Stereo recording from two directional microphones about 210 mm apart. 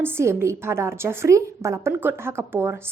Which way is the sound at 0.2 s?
10° right (ahead or behind).